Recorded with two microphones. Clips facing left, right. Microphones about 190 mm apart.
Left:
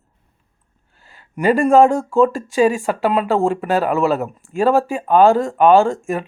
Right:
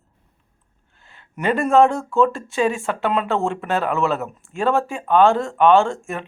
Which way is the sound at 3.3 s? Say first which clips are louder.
Left 5 dB; 35° left (ahead or behind).